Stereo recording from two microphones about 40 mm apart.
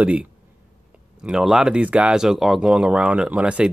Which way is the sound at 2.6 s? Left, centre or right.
Right.